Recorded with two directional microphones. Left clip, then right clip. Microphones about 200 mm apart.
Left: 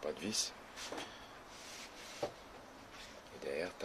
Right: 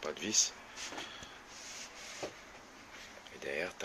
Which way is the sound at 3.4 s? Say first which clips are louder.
Right 2 dB; 10° right (ahead or behind).